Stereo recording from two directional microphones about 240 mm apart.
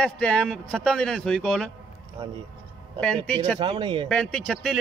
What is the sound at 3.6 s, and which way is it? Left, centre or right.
Speech, centre.